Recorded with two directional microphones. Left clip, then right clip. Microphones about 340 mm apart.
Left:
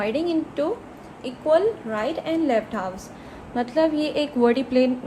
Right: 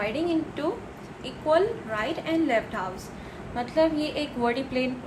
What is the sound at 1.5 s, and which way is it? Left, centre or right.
A woman's voice, left.